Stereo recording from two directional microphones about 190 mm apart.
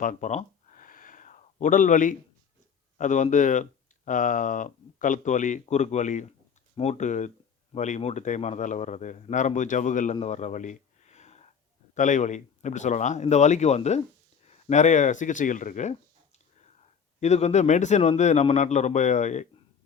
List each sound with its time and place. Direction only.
0.0 s a sound: 40° left (ahead or behind)
3.0 s speech: 40° left (ahead or behind)
17.2 s speech: 35° left (ahead or behind)